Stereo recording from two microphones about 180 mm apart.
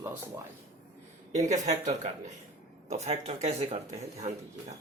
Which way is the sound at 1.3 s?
40° right (ahead or behind).